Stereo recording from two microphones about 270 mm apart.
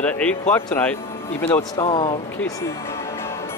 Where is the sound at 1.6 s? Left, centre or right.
Centre.